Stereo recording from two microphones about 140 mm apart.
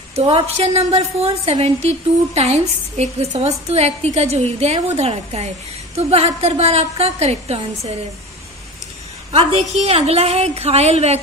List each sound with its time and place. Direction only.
0.1 s a woman's voice: 45° right (ahead or behind)
9.3 s a woman's voice: 45° right (ahead or behind)